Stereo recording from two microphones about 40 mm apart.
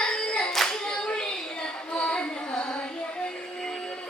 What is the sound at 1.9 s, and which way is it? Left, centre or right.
Child singing, left.